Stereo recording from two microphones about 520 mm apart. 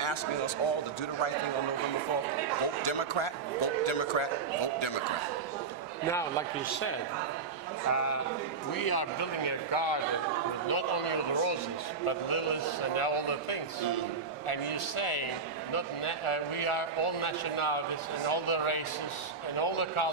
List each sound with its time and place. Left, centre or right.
2.8 s speech: left
7.9 s speech: left
8.7 s a man's voice: left
10.7 s speech: left
12.9 s a man's voice: left